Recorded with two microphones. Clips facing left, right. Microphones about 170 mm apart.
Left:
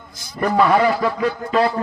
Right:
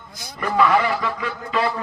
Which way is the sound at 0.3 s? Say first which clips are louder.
Left 3 dB; 40° left (ahead or behind).